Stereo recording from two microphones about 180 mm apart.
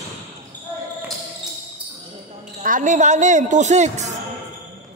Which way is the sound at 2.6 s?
45° right (ahead or behind).